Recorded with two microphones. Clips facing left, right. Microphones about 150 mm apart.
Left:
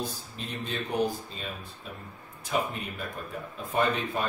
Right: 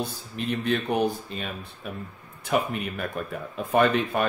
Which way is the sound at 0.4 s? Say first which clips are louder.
Right 9 dB; 65° right (ahead or behind).